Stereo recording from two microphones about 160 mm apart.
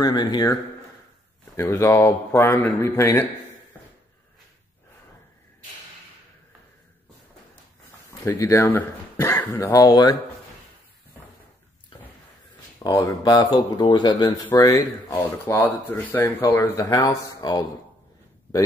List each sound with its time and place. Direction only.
0.0 s speech: 25° left (ahead or behind)
1.6 s speech: 15° left (ahead or behind)
8.3 s speech: 20° left (ahead or behind)
11.9 s a sound: 30° left (ahead or behind)
12.7 s speech: 20° left (ahead or behind)